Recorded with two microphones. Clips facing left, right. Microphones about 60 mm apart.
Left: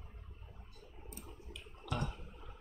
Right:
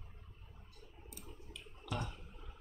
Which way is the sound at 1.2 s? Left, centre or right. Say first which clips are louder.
Left 1 dB; centre.